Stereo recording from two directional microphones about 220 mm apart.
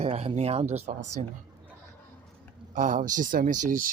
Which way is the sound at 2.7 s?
35° right (ahead or behind).